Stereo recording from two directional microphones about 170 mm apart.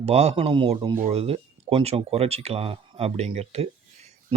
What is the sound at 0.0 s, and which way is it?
Speech, 40° right (ahead or behind).